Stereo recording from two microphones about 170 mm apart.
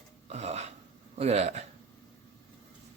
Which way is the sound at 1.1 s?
40° right (ahead or behind).